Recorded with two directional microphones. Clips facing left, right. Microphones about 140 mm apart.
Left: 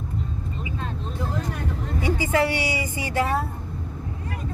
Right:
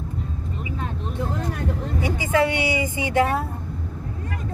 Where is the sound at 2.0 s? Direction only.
15° right (ahead or behind).